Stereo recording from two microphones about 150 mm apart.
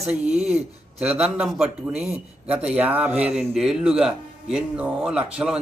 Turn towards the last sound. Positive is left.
turn(degrees=-5)  # may be behind; listen again after turning